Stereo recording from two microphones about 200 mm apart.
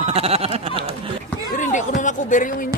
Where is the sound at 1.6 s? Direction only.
40° left (ahead or behind).